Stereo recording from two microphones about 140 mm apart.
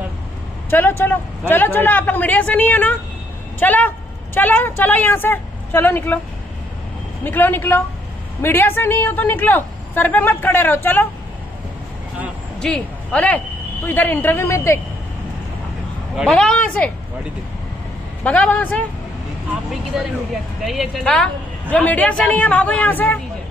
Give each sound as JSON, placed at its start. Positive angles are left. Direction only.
{"t": 0.7, "sound": "a woman's voice", "side_deg": 15}
{"t": 7.2, "sound": "a woman's voice", "side_deg": 15}
{"t": 12.5, "sound": "a woman's voice", "side_deg": 5}
{"t": 16.3, "sound": "a woman's voice", "side_deg": 5}
{"t": 18.2, "sound": "a woman's voice", "side_deg": 10}
{"t": 19.9, "sound": "a woman's voice", "side_deg": -5}